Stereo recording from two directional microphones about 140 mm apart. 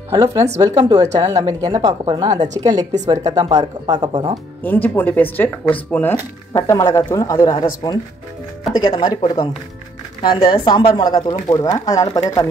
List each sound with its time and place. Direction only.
0.1 s speech: 25° right (ahead or behind)
4.6 s speech: 15° left (ahead or behind)
6.5 s a woman's voice: 25° left (ahead or behind)
8.7 s a woman's voice: 30° left (ahead or behind)